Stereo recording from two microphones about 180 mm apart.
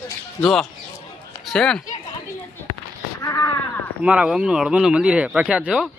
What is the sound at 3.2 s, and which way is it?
Speech, 15° left (ahead or behind).